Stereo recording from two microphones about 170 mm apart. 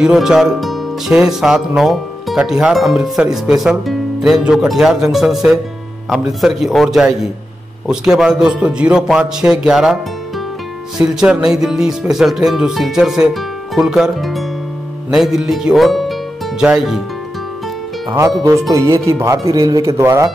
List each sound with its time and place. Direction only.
0.0 s speech: 5° right (ahead or behind)
11.0 s speech: 5° right (ahead or behind)
18.4 s speech: 20° right (ahead or behind)